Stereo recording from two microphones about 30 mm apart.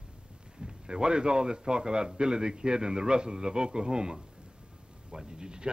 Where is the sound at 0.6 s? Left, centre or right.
Right.